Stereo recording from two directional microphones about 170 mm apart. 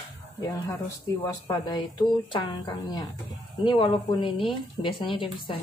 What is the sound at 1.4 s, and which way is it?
Speech, 25° left (ahead or behind).